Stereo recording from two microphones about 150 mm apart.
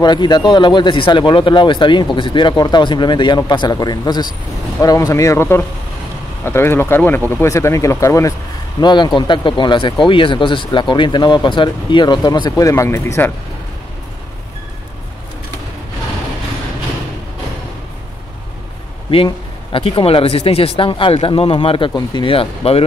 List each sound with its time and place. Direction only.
0.0 s speech: 30° left (ahead or behind)
8.8 s speech: 30° left (ahead or behind)
19.0 s speech: 35° left (ahead or behind)